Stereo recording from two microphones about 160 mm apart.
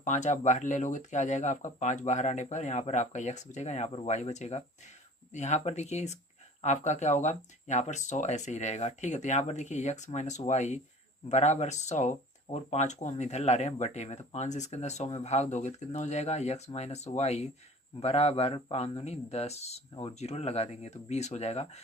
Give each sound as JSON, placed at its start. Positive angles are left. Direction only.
{"t": 0.0, "sound": "speech", "side_deg": 50}